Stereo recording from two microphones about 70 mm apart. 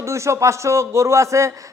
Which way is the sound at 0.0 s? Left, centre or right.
Right.